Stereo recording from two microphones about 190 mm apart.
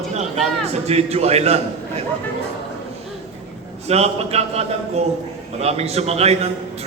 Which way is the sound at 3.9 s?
35° right (ahead or behind).